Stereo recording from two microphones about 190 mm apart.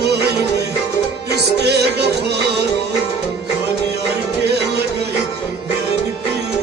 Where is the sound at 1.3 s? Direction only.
60° right (ahead or behind).